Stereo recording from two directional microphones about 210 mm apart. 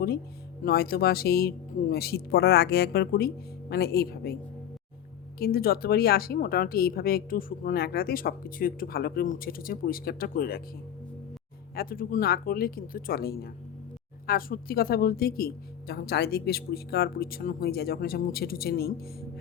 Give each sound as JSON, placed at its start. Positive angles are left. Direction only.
{"t": 0.6, "sound": "a woman's voice", "side_deg": 45}
{"t": 5.4, "sound": "a woman's voice", "side_deg": 45}
{"t": 11.7, "sound": "a woman's voice", "side_deg": 45}